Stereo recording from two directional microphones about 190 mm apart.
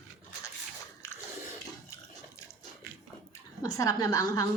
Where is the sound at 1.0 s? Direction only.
15° left (ahead or behind).